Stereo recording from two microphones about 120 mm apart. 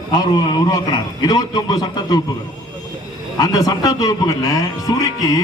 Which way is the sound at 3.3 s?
30° left (ahead or behind).